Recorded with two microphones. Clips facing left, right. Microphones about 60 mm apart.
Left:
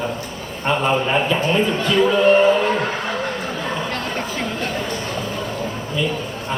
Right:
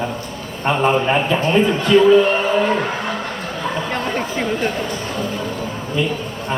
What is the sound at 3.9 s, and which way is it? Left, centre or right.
Chatter, centre.